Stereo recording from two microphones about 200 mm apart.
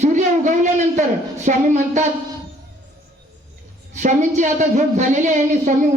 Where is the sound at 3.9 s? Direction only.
35° right (ahead or behind).